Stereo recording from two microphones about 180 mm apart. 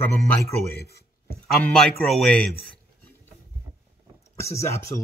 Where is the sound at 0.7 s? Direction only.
60° left (ahead or behind).